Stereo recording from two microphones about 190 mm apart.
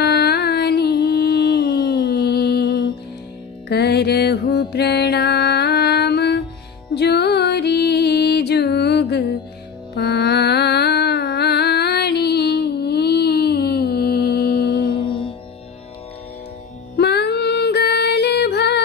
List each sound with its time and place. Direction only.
0.0 s music: 60° left (ahead or behind)
16.9 s music: 60° left (ahead or behind)